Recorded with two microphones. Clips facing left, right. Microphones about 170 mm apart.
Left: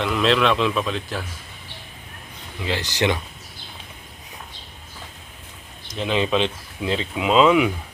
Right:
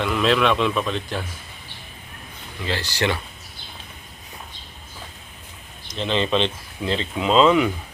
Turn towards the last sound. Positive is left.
turn(degrees=5)  # may be behind; listen again after turning